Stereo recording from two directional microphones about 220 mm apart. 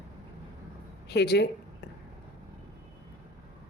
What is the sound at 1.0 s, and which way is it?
Speech, 50° left (ahead or behind).